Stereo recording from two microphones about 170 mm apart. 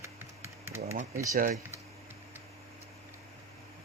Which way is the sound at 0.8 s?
40° right (ahead or behind).